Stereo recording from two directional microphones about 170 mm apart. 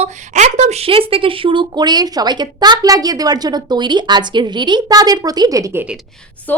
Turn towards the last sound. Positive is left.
turn(degrees=-20)  # may be behind; listen again after turning